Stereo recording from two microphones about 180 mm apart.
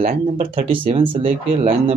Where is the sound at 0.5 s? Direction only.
30° right (ahead or behind).